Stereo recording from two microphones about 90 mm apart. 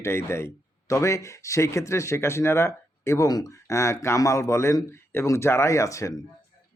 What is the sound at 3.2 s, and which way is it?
Speech, 45° left (ahead or behind).